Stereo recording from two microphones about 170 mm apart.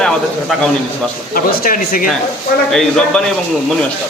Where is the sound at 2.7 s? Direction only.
5° left (ahead or behind).